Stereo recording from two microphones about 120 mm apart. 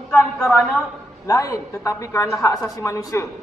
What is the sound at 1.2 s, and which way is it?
A man's voice, 25° left (ahead or behind).